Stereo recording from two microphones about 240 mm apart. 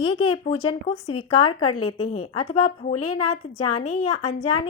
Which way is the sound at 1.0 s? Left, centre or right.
Left.